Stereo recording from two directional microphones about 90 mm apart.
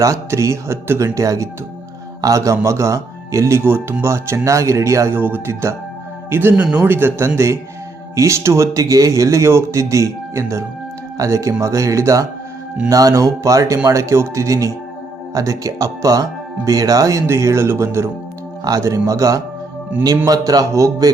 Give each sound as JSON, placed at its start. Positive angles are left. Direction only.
{"t": 0.0, "sound": "speech", "side_deg": -35}
{"t": 3.6, "sound": "a man's voice", "side_deg": -25}